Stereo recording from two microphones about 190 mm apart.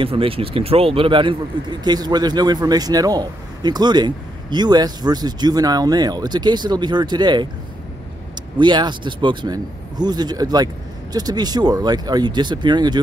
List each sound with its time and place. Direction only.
0.0 s speech: 30° right (ahead or behind)
8.5 s speech: 25° right (ahead or behind)